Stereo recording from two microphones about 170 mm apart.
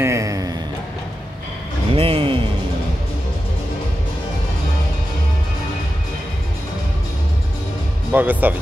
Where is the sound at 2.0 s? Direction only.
30° right (ahead or behind).